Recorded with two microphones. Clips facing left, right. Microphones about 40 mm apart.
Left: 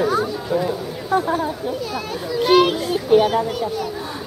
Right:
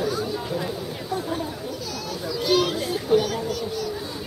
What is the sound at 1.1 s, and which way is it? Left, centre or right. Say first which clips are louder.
Speech: left 9 dB; left.